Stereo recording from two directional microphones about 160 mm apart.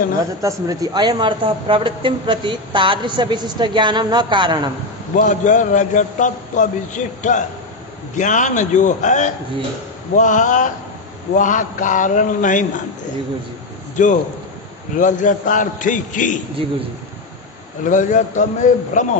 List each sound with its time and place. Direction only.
0.4 s speech: 20° right (ahead or behind)
5.1 s a man's voice: 50° left (ahead or behind)
13.9 s a man's voice: 50° left (ahead or behind)
17.8 s a man's voice: 50° left (ahead or behind)